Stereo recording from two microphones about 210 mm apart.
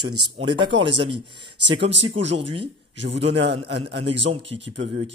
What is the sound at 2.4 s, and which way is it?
Speech, 25° right (ahead or behind).